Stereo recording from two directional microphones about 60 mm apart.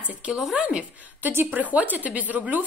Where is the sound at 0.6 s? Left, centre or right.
Right.